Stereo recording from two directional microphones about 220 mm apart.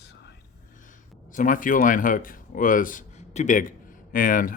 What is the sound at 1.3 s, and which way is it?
Speech, 35° left (ahead or behind).